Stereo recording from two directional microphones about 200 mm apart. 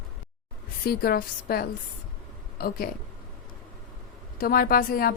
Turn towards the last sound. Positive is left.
turn(degrees=45)  # may be behind; listen again after turning